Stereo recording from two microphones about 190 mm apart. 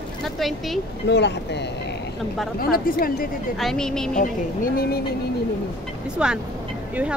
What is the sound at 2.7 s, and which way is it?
Speech, 50° left (ahead or behind).